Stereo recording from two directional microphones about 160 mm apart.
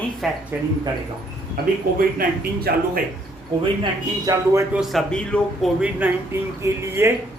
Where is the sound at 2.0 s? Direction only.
70° right (ahead or behind).